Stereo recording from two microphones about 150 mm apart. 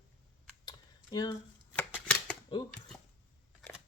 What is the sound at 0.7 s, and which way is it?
Computer keyboard, 25° left (ahead or behind).